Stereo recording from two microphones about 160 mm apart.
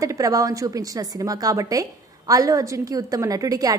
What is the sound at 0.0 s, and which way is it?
A woman's voice, 20° right (ahead or behind).